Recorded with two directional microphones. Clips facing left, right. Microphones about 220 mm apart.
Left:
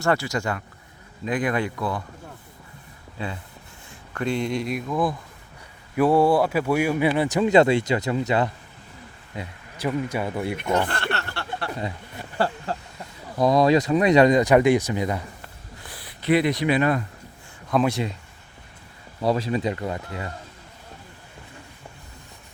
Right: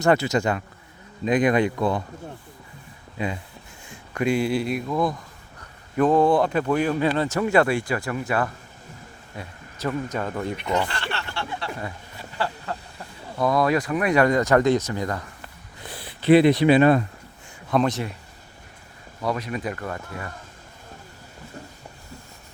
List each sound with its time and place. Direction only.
0.0 s speech: 20° right (ahead or behind)
3.2 s speech: 15° right (ahead or behind); by 10.6 s 10° left (ahead or behind)
10.8 s speech: 55° left (ahead or behind)
12.7 s snake: 30° left (ahead or behind)
13.4 s speech: 20° left (ahead or behind)
15.8 s speech: 25° right (ahead or behind)
17.7 s speech: centre (ahead or behind)
19.2 s speech: 30° left (ahead or behind)